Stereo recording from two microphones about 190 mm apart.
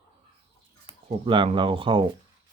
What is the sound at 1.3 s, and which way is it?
Speech, 25° right (ahead or behind).